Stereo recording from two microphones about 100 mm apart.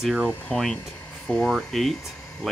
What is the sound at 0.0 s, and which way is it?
Speech, 10° right (ahead or behind).